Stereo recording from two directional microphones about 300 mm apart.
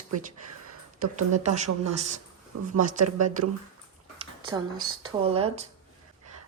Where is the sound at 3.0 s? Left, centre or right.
Right.